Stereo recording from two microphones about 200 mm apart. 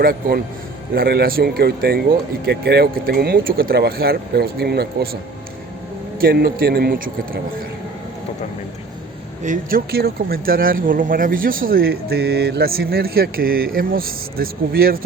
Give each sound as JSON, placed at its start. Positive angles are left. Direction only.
{"t": 0.0, "sound": "speech", "side_deg": -50}
{"t": 6.1, "sound": "speech", "side_deg": -50}
{"t": 9.4, "sound": "speech", "side_deg": -40}